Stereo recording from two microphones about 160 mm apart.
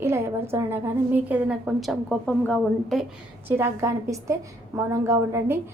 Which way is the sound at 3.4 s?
15° right (ahead or behind).